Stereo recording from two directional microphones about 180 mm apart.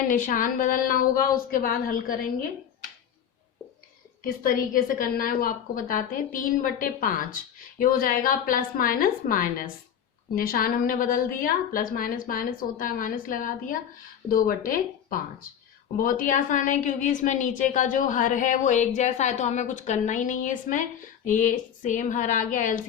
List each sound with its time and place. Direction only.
0.1 s a woman's voice: 50° left (ahead or behind)
4.2 s a woman's voice: 50° left (ahead or behind)